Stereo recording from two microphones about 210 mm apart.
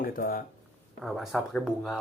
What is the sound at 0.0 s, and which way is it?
Speech, 40° left (ahead or behind).